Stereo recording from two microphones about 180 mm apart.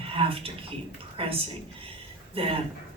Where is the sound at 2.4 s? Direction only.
30° right (ahead or behind).